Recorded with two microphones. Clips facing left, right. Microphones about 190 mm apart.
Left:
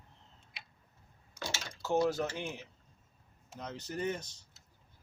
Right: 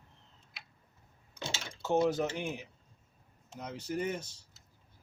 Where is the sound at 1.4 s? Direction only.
20° right (ahead or behind).